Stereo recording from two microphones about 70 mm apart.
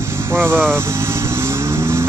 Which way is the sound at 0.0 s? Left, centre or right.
Right.